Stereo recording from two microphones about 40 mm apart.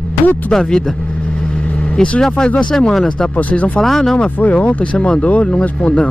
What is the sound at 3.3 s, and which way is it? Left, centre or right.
Speech, left.